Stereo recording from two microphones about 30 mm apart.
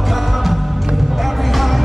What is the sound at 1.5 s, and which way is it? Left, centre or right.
Music, centre.